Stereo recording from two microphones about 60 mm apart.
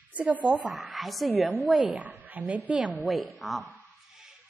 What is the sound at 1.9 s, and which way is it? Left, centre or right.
Speech, right.